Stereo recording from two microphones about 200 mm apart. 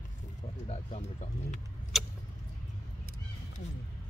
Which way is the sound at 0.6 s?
30° left (ahead or behind).